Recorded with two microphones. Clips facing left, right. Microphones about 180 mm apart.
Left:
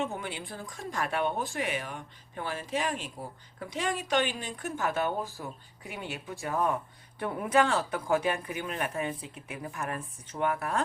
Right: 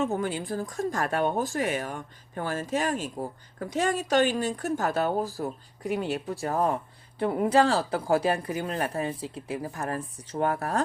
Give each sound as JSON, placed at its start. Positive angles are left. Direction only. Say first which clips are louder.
{"t": 0.0, "sound": "speech", "louder": "right 7 dB", "side_deg": -40}